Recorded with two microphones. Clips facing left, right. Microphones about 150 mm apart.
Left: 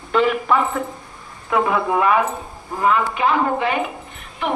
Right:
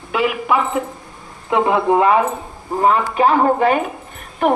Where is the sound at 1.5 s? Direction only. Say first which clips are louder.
Right 4 dB; 25° right (ahead or behind).